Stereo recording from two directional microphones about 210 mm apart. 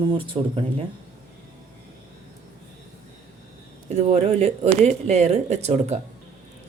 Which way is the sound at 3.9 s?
30° right (ahead or behind).